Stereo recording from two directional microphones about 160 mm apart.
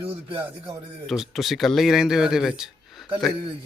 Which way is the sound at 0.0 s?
35° right (ahead or behind).